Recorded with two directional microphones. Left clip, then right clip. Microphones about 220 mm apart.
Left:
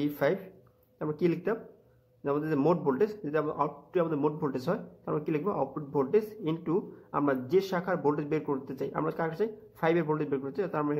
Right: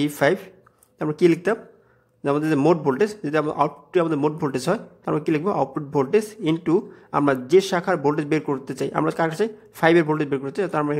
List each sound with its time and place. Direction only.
0.0 s a man's voice: 30° right (ahead or behind)